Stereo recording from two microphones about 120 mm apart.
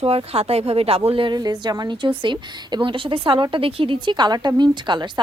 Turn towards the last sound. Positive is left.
turn(degrees=-40)  # may be behind; listen again after turning